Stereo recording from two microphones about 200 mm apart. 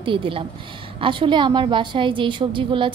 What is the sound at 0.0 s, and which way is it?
A woman's voice, 25° right (ahead or behind).